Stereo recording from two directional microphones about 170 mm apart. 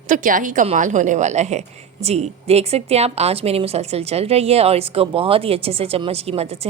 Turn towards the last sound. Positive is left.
turn(degrees=-35)  # may be behind; listen again after turning